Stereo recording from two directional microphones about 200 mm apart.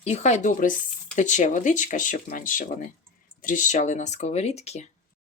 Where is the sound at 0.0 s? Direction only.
35° left (ahead or behind).